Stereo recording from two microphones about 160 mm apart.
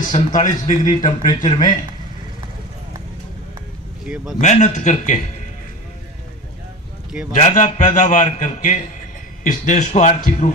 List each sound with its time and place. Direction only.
0.0 s a man's voice: 50° left (ahead or behind)
0.9 s speech: 25° left (ahead or behind)
4.0 s speech: 5° right (ahead or behind)
4.4 s a man's voice: 50° left (ahead or behind)
7.3 s a man's voice: 45° left (ahead or behind)